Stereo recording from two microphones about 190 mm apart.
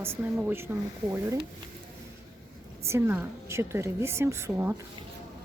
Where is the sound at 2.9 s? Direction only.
15° right (ahead or behind).